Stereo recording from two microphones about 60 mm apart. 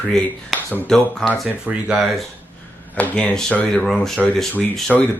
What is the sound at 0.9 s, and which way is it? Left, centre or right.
Speech, centre.